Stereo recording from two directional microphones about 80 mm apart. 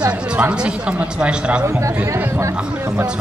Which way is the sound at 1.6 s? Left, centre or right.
Right.